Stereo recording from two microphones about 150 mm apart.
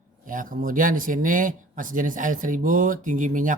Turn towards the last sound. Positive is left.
turn(degrees=-60)  # may be behind; listen again after turning